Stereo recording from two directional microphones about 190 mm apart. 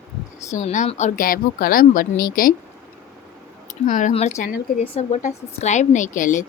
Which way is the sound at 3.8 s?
40° left (ahead or behind).